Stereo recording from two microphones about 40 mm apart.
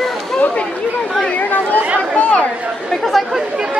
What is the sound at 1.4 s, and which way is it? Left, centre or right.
Speech, left.